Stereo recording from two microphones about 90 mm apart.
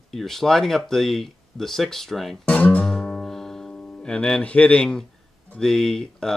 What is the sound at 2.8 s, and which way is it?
Music, 10° left (ahead or behind).